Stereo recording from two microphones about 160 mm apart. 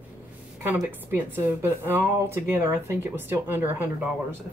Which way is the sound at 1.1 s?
15° right (ahead or behind).